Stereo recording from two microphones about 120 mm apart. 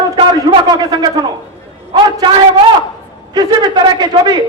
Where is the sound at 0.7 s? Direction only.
35° right (ahead or behind).